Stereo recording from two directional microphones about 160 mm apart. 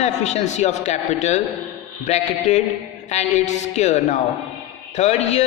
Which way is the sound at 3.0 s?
45° left (ahead or behind).